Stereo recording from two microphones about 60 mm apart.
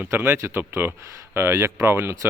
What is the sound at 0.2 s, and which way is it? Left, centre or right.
Speech, right.